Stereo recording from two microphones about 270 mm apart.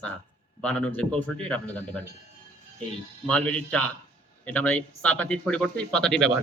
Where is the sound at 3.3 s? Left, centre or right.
Centre.